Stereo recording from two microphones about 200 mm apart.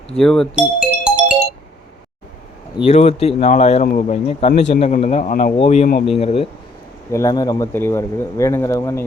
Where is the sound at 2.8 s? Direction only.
30° left (ahead or behind).